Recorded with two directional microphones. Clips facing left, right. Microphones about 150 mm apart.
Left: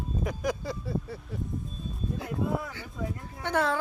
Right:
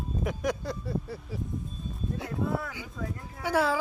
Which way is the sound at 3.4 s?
5° right (ahead or behind).